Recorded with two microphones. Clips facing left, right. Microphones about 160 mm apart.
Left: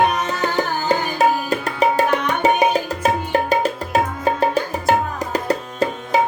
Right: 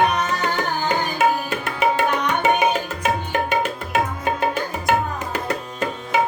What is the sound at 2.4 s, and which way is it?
Music, 35° left (ahead or behind).